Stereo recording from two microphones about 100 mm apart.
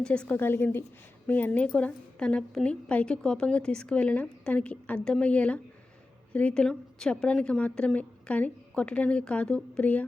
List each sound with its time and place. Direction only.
0.0 s a woman's voice: 10° left (ahead or behind)